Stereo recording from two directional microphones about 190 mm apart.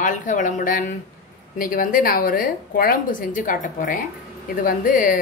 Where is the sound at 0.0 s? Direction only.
40° left (ahead or behind).